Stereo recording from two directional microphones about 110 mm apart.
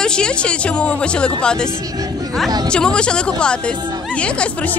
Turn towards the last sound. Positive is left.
turn(degrees=10)  # may be behind; listen again after turning